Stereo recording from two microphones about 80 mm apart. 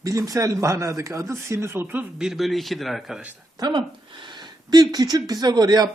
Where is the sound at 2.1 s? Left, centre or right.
Centre.